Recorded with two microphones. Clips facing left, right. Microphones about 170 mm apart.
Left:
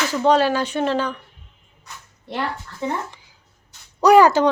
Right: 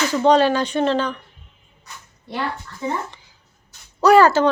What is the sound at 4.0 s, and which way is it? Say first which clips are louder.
Speech: even; 15° left (ahead or behind).